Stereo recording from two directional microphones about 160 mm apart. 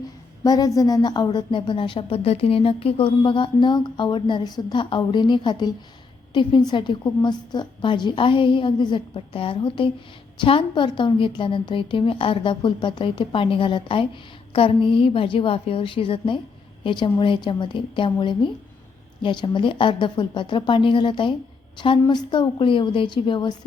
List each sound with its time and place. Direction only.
0.4 s a woman's voice: 25° left (ahead or behind)